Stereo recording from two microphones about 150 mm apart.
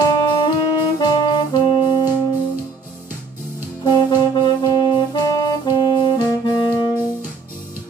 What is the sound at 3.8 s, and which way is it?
Music, 30° left (ahead or behind).